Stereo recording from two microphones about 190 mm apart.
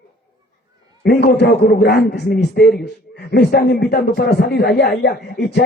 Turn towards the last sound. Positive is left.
turn(degrees=60)  # may be behind; listen again after turning